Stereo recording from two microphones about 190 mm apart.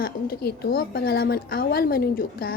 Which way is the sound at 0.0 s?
55° left (ahead or behind).